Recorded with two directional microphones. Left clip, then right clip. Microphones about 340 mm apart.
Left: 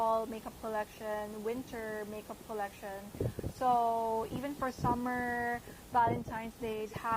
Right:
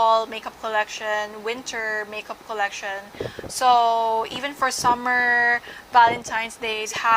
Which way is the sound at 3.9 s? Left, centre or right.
Centre.